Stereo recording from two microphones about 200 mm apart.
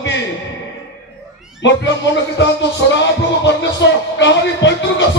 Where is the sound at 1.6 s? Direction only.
60° left (ahead or behind).